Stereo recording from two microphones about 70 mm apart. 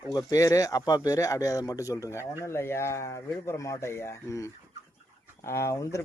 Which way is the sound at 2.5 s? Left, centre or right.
Left.